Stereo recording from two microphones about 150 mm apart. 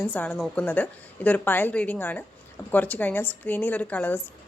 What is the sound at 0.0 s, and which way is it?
A woman's voice, 10° left (ahead or behind).